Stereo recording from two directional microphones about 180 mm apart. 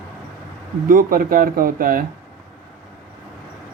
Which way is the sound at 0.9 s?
50° right (ahead or behind).